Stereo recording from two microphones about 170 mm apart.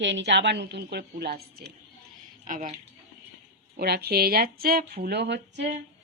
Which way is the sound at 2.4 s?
50° right (ahead or behind).